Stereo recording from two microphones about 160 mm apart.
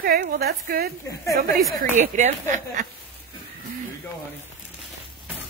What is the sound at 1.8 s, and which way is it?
Speech, 50° right (ahead or behind).